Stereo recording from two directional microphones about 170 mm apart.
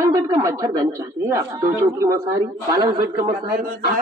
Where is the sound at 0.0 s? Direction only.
20° right (ahead or behind).